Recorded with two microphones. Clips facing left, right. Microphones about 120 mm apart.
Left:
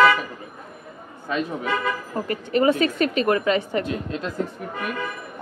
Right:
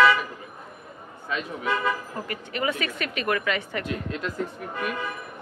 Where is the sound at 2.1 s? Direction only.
35° left (ahead or behind).